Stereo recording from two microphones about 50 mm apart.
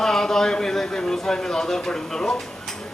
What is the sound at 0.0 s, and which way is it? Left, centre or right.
A man's voice, centre.